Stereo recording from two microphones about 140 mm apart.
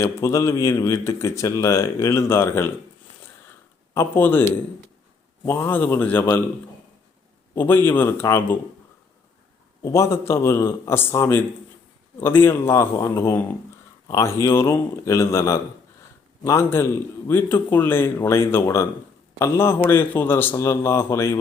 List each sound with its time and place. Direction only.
0.0 s speech: 20° left (ahead or behind)
3.9 s a man's voice: 15° left (ahead or behind)
7.5 s a man's voice: 15° left (ahead or behind)
9.8 s a man's voice: 20° left (ahead or behind)